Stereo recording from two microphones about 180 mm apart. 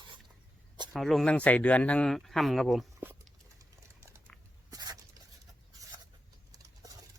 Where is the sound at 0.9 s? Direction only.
Centre (ahead or behind).